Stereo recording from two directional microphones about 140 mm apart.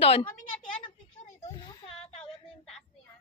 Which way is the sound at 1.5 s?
40° left (ahead or behind).